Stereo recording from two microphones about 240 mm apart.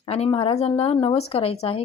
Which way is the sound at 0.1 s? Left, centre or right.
Left.